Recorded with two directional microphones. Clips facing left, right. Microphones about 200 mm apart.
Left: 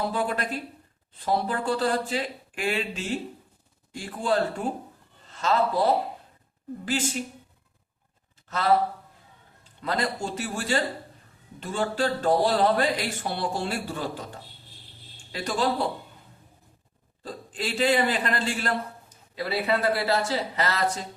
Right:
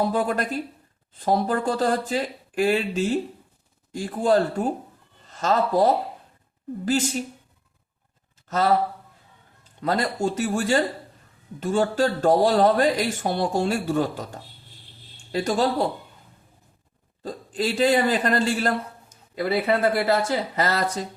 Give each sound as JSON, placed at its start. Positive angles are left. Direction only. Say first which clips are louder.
{"t": 0.1, "sound": "a man's voice", "louder": "right 4 dB", "side_deg": -40}
{"t": 8.4, "sound": "a man's voice", "louder": "right 5 dB", "side_deg": -40}
{"t": 9.8, "sound": "a man's voice", "louder": "right 5 dB", "side_deg": -40}
{"t": 17.2, "sound": "a man's voice", "louder": "right 6 dB", "side_deg": -40}